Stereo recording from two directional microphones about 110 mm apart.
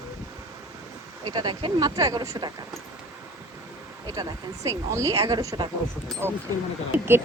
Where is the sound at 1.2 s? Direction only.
40° right (ahead or behind).